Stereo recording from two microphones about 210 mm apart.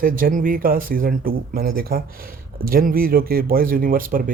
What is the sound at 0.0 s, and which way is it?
Speech, 40° right (ahead or behind).